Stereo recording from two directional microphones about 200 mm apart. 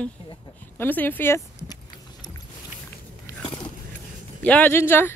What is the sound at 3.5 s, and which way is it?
Biting, 25° left (ahead or behind).